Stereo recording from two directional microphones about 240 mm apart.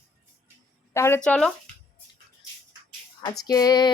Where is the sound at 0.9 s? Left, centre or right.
Centre.